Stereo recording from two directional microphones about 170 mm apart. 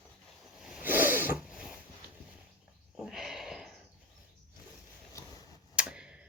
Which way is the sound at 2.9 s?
Centre (ahead or behind).